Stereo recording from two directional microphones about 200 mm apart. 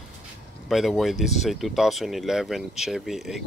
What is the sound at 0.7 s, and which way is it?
Speech, centre (ahead or behind).